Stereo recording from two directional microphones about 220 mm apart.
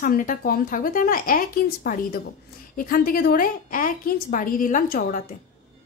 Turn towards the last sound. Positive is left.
turn(degrees=35)  # may be behind; listen again after turning